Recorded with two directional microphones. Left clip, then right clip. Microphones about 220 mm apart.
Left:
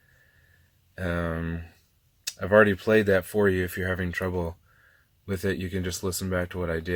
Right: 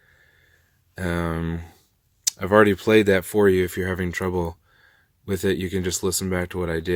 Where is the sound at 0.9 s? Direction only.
45° right (ahead or behind).